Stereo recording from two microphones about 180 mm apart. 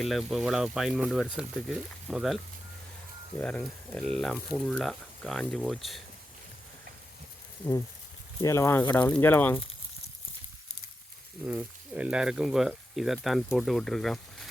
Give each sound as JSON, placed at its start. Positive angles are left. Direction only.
{"t": 0.0, "sound": "speech", "side_deg": 0}
{"t": 3.4, "sound": "speech", "side_deg": 5}
{"t": 8.4, "sound": "speech", "side_deg": 15}
{"t": 11.4, "sound": "speech", "side_deg": -5}